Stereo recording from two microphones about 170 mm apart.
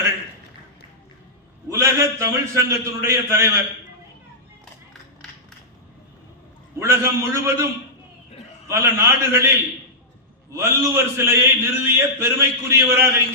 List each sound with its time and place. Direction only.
1.7 s a man's voice: 20° right (ahead or behind)
6.8 s a man's voice: 15° right (ahead or behind)
8.6 s a man's voice: 15° right (ahead or behind)
10.5 s a man's voice: 15° right (ahead or behind)